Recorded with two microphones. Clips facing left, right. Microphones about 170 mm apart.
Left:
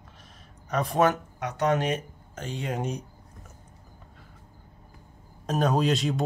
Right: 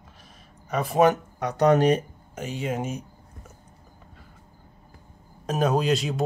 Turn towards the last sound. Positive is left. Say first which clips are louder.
# right 1 dB
turn(degrees=0)  # may be behind; listen again after turning